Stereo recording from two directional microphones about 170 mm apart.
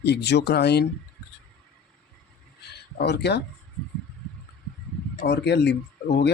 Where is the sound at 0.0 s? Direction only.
80° left.